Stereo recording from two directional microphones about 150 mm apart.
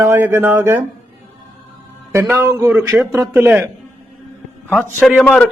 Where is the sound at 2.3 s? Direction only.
15° right (ahead or behind).